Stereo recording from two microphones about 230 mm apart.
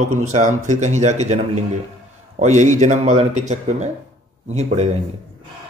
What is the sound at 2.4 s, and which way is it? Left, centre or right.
A man's voice, right.